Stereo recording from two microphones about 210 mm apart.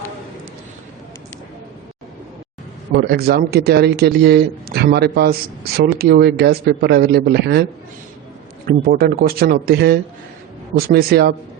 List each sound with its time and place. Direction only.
2.9 s a man's voice: 50° right (ahead or behind)
8.6 s a man's voice: 45° right (ahead or behind)